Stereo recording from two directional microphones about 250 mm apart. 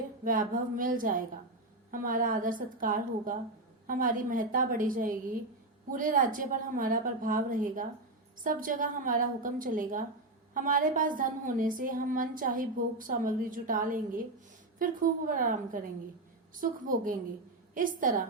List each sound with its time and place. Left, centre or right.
0.3 s a woman's voice: right